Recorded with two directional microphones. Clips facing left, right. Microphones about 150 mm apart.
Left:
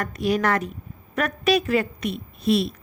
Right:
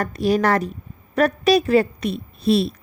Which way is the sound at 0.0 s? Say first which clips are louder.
Right 4 dB; 35° right (ahead or behind).